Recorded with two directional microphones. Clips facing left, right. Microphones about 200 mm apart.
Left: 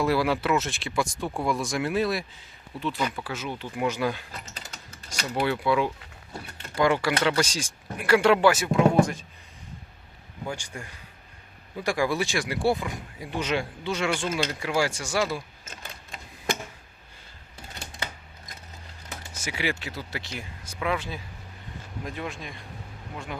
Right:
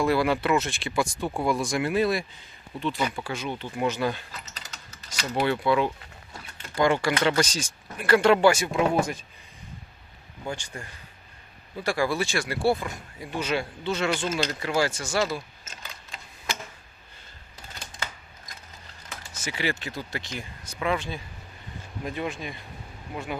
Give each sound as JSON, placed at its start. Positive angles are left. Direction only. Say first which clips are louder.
{"t": 0.0, "sound": "speech", "louder": "right 1 dB", "side_deg": 5}
{"t": 5.5, "sound": "speech", "louder": "right 1 dB", "side_deg": 5}
{"t": 10.5, "sound": "speech", "louder": "right 2 dB", "side_deg": 10}
{"t": 15.6, "sound": "a sound", "louder": "left 2 dB", "side_deg": 55}
{"t": 19.4, "sound": "speech", "louder": "right 1 dB", "side_deg": 10}